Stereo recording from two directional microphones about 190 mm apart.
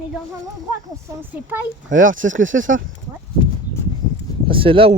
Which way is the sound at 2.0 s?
45° right (ahead or behind).